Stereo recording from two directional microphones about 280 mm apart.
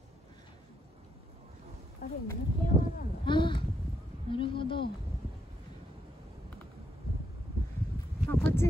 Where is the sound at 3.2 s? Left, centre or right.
Centre.